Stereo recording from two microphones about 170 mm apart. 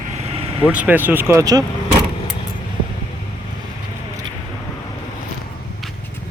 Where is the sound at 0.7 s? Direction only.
10° right (ahead or behind).